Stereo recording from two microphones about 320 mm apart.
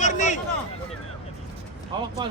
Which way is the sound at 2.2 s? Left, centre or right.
Centre.